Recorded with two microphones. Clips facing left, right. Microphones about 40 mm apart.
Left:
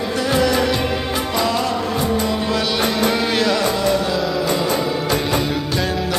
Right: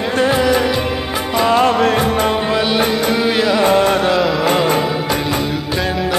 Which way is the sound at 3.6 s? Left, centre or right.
Right.